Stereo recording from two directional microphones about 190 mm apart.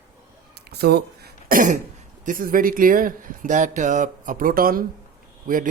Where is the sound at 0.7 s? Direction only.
60° right (ahead or behind).